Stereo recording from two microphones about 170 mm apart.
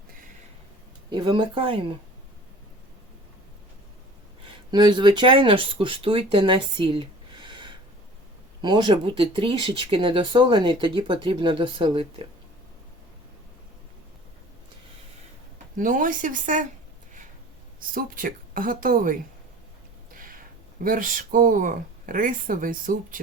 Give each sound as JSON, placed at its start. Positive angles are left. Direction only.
{"t": 1.1, "sound": "speech", "side_deg": -25}
{"t": 4.4, "sound": "speech", "side_deg": -25}
{"t": 6.3, "sound": "a sound", "side_deg": -30}
{"t": 8.6, "sound": "speech", "side_deg": -25}
{"t": 15.8, "sound": "speech", "side_deg": -50}
{"t": 17.7, "sound": "a woman's voice", "side_deg": -55}
{"t": 20.1, "sound": "a sound", "side_deg": -55}
{"t": 20.8, "sound": "speech", "side_deg": -55}